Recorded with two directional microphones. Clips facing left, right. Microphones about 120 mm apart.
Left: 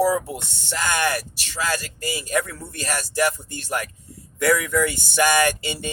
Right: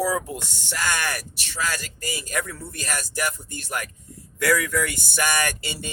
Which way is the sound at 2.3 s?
25° left (ahead or behind).